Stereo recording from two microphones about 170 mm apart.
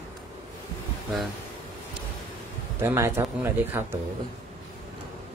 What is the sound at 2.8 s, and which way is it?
Speech, 15° right (ahead or behind).